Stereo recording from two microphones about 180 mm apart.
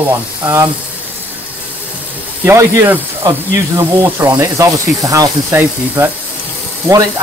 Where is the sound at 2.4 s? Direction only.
15° right (ahead or behind).